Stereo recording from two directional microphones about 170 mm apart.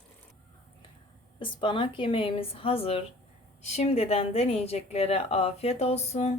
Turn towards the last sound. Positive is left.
turn(degrees=40)  # may be behind; listen again after turning